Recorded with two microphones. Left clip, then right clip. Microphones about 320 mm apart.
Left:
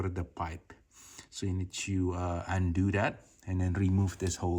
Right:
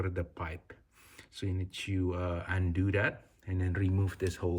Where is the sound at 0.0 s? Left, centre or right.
Centre.